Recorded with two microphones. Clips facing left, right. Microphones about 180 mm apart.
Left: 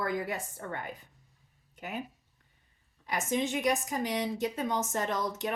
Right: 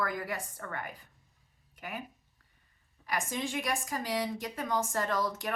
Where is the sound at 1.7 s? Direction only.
25° left (ahead or behind).